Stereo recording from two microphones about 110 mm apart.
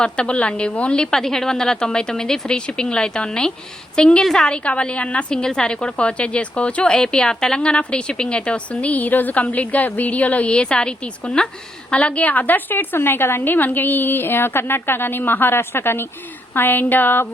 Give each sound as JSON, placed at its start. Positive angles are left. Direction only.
{"t": 0.0, "sound": "a woman's voice", "side_deg": 10}